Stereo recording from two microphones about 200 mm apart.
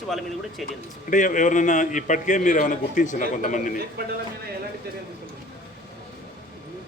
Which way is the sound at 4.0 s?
50° right (ahead or behind).